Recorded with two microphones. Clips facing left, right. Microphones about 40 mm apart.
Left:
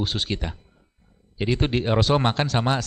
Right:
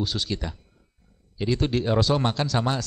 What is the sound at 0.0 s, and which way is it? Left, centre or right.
Speech, left.